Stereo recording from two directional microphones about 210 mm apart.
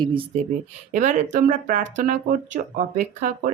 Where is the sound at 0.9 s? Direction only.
35° right (ahead or behind).